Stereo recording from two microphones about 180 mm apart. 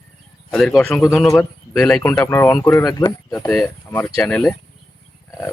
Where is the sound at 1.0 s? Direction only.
15° left (ahead or behind).